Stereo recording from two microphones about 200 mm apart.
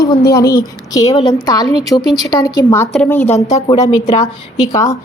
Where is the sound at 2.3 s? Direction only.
20° left (ahead or behind).